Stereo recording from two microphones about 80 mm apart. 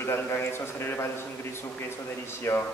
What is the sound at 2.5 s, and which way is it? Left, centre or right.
Speech, left.